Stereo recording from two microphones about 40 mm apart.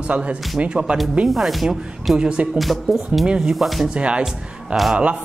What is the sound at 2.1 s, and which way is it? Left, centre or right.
Speech, right.